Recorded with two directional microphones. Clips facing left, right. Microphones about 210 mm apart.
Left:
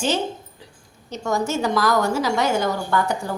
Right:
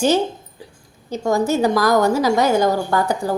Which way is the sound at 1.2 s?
35° right (ahead or behind).